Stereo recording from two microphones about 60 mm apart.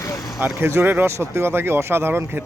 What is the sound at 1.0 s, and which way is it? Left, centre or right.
Speech, right.